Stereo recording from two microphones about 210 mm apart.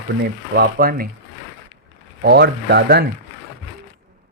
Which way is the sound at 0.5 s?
45° right (ahead or behind).